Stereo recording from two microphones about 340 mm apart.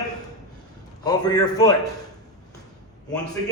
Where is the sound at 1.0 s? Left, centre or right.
Centre.